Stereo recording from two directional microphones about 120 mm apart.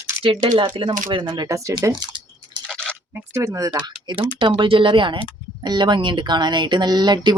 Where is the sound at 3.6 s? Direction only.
35° right (ahead or behind).